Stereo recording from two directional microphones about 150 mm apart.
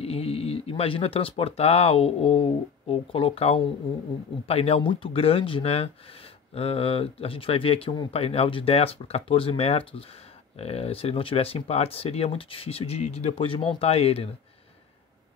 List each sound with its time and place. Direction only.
0.0 s speech: 40° left (ahead or behind)